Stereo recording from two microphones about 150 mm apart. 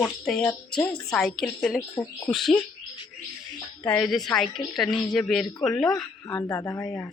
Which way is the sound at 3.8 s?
10° left (ahead or behind).